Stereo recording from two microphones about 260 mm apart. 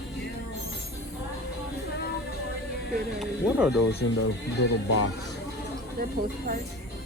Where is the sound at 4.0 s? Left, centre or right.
Left.